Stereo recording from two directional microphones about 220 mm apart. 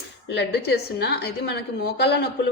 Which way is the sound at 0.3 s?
50° left (ahead or behind).